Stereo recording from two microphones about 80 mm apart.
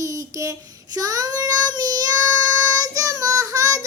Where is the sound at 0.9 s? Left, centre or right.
Right.